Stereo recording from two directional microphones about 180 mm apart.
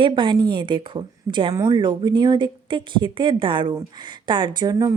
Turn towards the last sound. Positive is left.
turn(degrees=-20)  # may be behind; listen again after turning